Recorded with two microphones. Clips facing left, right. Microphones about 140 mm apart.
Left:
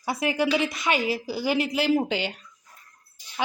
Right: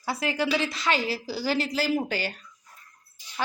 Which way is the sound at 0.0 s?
20° left (ahead or behind).